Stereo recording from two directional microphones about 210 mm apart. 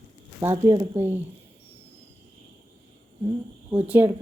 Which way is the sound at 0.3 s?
15° right (ahead or behind).